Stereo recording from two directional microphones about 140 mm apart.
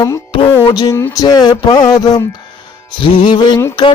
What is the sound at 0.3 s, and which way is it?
Music, 40° left (ahead or behind).